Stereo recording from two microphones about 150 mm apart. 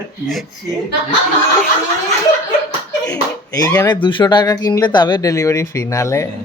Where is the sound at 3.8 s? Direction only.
30° left (ahead or behind).